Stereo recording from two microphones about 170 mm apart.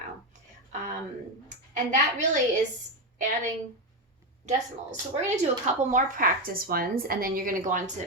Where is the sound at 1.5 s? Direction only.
45° right (ahead or behind).